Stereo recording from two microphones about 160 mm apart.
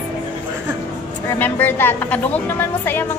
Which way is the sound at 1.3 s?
10° left (ahead or behind).